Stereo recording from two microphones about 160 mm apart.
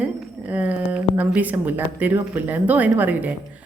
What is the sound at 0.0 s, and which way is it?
A woman's voice, 10° right (ahead or behind).